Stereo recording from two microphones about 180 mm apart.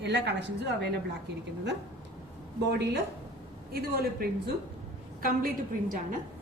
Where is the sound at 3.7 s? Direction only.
60° right (ahead or behind).